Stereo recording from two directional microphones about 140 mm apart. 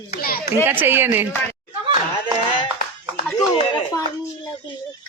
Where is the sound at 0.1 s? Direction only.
90° left.